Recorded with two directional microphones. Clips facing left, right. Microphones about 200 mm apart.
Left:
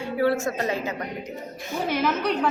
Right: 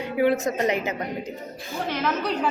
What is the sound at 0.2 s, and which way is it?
Speech, 20° right (ahead or behind).